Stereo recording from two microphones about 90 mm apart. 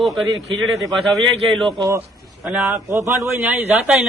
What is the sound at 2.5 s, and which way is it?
A man's voice, 25° right (ahead or behind).